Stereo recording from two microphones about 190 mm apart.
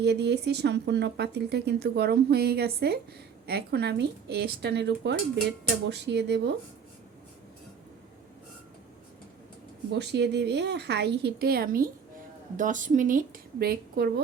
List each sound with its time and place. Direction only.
0.0 s speech: 60° right (ahead or behind)
10.0 s speech: 65° right (ahead or behind)